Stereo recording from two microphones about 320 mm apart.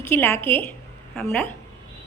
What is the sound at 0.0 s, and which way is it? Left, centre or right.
A woman's voice, centre.